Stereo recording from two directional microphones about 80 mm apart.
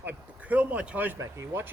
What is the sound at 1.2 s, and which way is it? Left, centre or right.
Speech, right.